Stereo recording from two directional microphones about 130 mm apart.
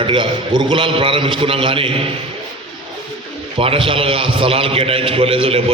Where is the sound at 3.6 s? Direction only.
45° right (ahead or behind).